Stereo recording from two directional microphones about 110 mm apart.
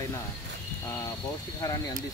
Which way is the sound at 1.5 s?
30° left (ahead or behind).